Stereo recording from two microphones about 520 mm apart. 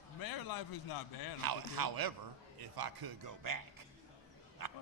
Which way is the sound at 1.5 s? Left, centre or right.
Right.